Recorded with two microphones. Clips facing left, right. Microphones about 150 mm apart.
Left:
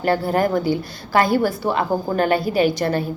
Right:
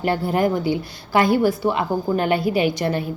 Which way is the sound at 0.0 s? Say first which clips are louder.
Left 1 dB; 15° right (ahead or behind).